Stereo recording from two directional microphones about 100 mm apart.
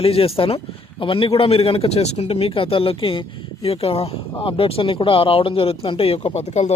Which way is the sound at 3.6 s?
80° left.